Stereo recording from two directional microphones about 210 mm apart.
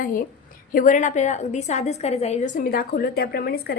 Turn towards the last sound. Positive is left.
turn(degrees=45)  # may be behind; listen again after turning